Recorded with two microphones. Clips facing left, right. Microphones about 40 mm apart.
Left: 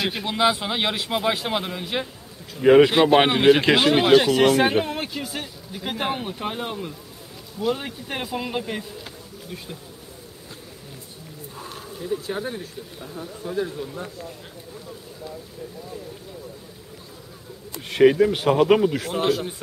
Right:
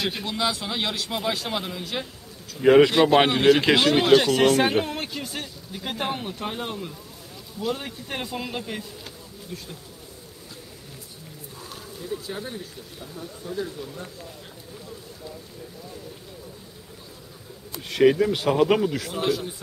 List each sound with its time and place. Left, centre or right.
0.0 s speech: centre
0.3 s speech: left
12.3 s speech: left
17.8 s speech: centre
18.9 s a man's voice: left